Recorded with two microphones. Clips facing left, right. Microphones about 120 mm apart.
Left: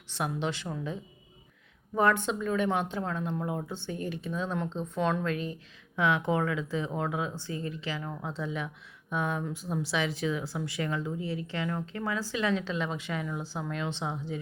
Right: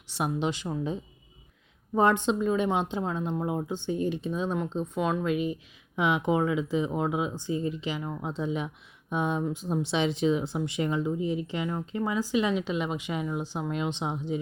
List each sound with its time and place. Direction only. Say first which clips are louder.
0.1 s speech: right 3 dB; 15° right (ahead or behind)
2.0 s speech: right 3 dB; 25° right (ahead or behind)